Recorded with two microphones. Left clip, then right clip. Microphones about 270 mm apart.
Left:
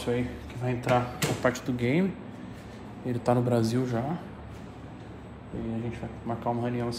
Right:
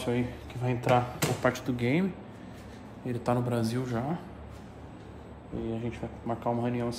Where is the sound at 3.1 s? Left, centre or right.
Centre.